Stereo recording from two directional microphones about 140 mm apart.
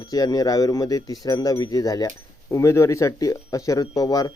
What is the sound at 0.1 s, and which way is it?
Speech, 25° left (ahead or behind).